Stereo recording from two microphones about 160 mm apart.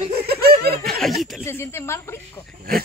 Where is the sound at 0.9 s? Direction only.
5° left (ahead or behind).